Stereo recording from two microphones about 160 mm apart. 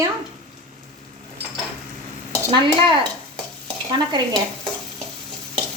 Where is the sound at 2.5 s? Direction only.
30° right (ahead or behind).